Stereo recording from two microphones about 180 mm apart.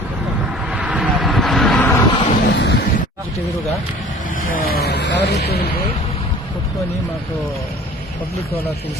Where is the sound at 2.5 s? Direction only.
75° left (ahead or behind).